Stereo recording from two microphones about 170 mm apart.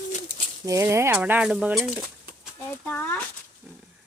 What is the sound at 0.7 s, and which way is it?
A woman's voice, 15° right (ahead or behind).